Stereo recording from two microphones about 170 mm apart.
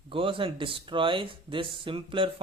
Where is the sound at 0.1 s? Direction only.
30° right (ahead or behind).